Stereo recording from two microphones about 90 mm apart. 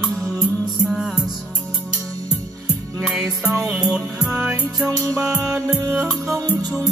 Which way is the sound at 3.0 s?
5° right (ahead or behind).